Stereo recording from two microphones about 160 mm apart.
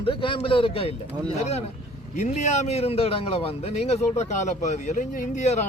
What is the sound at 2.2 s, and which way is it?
Speech, 45° left (ahead or behind).